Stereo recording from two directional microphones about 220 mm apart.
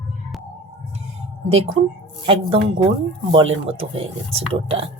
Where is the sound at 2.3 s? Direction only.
25° right (ahead or behind).